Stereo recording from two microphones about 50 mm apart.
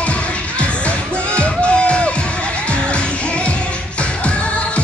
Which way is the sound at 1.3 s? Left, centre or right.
Left.